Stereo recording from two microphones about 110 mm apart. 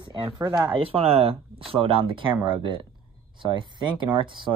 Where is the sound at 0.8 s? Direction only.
60° right (ahead or behind).